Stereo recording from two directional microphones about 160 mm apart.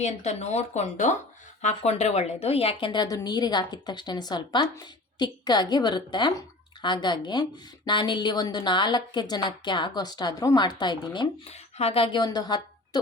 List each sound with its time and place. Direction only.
0.0 s a woman's voice: 45° left (ahead or behind); by 11.5 s 30° left (ahead or behind)
11.5 s speech: 40° left (ahead or behind)